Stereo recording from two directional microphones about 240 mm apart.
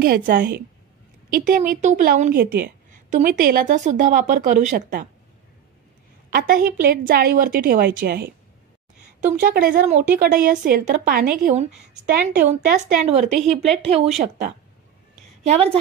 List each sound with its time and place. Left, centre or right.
0.0 s a woman's voice: right
6.3 s a woman's voice: right
9.4 s a woman's voice: right
13.5 s speech: centre
13.8 s a woman's voice: right